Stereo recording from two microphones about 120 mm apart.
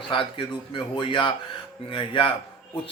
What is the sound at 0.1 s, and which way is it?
Speech, 45° left (ahead or behind).